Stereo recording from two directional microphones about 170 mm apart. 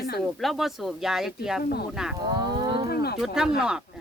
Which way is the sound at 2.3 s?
25° right (ahead or behind).